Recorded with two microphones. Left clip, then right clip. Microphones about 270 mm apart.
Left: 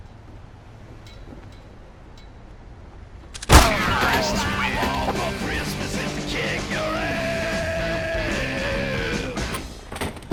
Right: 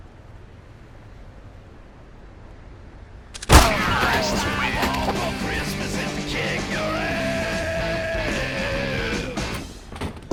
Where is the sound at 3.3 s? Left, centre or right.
Centre.